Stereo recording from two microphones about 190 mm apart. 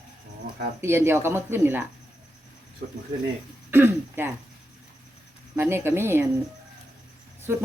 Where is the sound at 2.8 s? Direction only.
45° right (ahead or behind).